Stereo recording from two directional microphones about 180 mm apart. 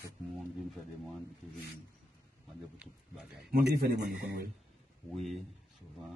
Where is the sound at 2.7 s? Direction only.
5° right (ahead or behind).